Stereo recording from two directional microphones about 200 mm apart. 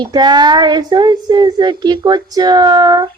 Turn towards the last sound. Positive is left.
turn(degrees=-20)  # may be behind; listen again after turning